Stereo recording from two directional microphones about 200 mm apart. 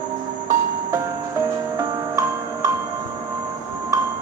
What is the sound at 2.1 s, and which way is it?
Glockenspiel, 15° right (ahead or behind).